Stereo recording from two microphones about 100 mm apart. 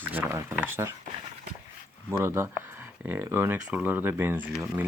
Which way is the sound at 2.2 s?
25° right (ahead or behind).